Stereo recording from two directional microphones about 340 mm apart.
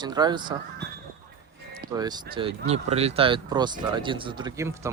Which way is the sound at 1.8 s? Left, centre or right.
Centre.